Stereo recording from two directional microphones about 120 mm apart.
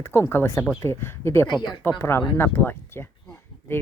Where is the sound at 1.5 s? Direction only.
40° left (ahead or behind).